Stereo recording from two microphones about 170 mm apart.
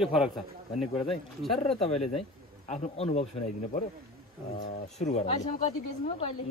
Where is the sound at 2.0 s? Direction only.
40° left (ahead or behind).